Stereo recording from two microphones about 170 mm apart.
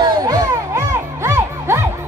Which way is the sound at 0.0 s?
20° right (ahead or behind).